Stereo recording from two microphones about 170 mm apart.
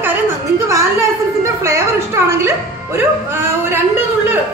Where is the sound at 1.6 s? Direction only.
15° right (ahead or behind).